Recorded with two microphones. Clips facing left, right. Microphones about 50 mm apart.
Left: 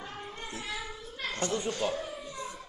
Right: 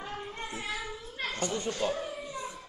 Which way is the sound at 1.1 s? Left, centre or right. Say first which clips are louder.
Left 1 dB; right.